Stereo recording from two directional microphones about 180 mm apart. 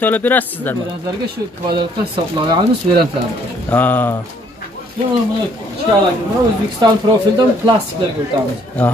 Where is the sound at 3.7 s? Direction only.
10° left (ahead or behind).